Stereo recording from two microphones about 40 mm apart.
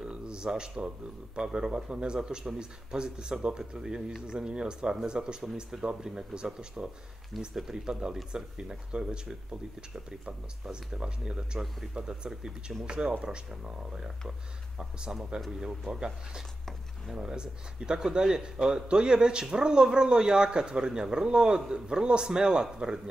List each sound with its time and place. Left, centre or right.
0.0 s speech: centre